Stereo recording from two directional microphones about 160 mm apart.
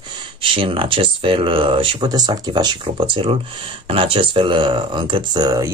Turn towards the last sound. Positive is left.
turn(degrees=-25)  # may be behind; listen again after turning